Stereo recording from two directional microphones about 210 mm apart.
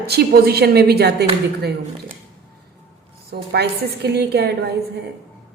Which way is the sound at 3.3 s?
50° right (ahead or behind).